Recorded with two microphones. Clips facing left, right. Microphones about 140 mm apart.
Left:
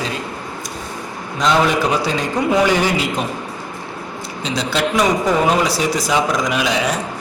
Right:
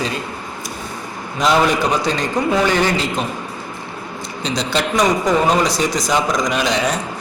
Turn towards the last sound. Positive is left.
turn(degrees=5)  # may be behind; listen again after turning